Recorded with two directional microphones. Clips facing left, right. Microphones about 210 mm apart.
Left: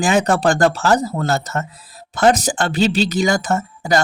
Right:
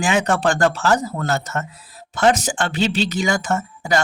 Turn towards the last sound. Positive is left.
turn(degrees=40)  # may be behind; listen again after turning